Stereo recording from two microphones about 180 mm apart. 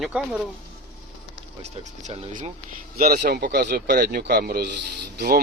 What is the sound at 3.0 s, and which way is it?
A man's voice, 60° right (ahead or behind).